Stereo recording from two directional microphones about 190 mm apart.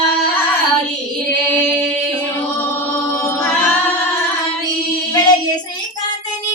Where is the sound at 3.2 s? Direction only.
10° left (ahead or behind).